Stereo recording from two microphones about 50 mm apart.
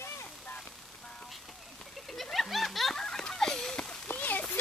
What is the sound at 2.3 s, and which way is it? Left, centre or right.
Snicker, centre.